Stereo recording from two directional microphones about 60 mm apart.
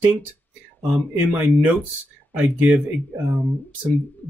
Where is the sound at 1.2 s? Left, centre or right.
Right.